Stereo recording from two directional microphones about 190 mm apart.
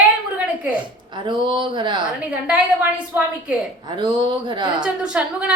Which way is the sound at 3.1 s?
10° right (ahead or behind).